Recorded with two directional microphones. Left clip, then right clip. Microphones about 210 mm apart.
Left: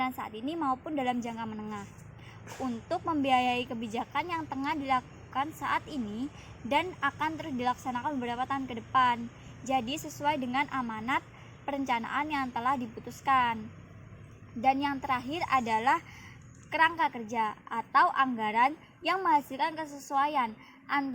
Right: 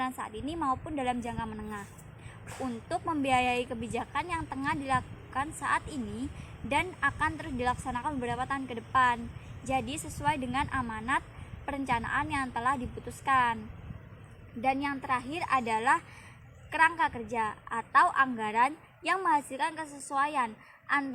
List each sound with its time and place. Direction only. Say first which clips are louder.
0.0 s a woman's voice: left 1 dB; 45° left (ahead or behind)
2.9 s a woman's voice: left 1 dB; 45° left (ahead or behind)
14.6 s a woman's voice: left 3 dB; 45° left (ahead or behind)